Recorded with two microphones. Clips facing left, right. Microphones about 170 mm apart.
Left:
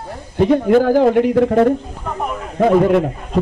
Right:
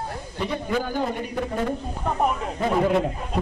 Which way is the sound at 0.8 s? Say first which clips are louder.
Left 15 dB; 90° left.